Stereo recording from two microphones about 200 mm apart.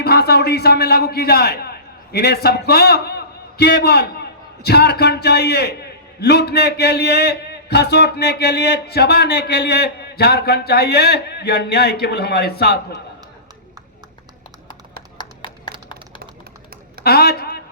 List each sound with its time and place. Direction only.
0.0 s a man's voice: 50° left (ahead or behind)
17.0 s a woman's voice: 50° left (ahead or behind)